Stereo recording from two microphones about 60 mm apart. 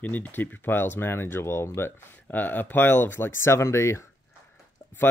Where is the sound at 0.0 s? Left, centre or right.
Left.